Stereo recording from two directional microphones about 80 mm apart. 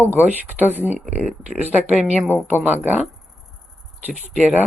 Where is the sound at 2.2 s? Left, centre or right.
Right.